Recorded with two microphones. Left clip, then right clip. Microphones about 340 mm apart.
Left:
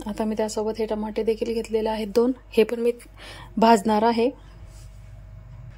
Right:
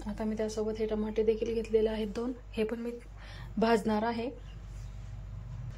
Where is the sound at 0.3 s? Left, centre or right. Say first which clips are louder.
Left 7 dB; centre.